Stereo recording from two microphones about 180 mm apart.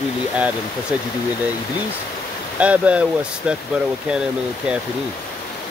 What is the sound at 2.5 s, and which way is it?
Speech, 5° right (ahead or behind).